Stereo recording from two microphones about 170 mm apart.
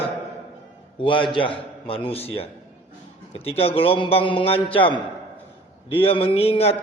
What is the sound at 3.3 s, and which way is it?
A man's voice, 35° left (ahead or behind).